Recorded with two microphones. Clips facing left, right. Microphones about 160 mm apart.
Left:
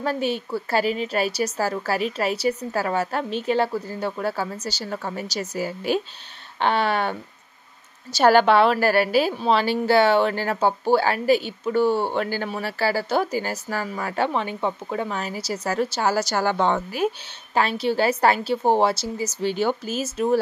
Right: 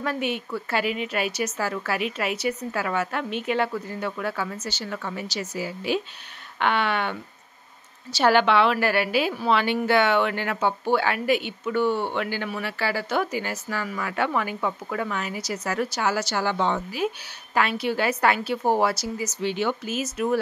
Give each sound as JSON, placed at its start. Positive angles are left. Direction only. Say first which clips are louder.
{"t": 0.0, "sound": "speech", "louder": "left 3 dB", "side_deg": 35}
{"t": 17.6, "sound": "speech", "louder": "left 3 dB", "side_deg": 30}